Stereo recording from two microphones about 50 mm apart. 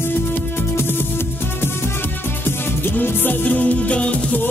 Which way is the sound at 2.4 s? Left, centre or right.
Left.